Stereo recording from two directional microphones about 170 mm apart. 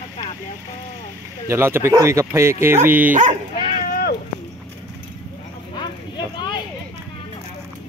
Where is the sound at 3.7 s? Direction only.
55° left (ahead or behind).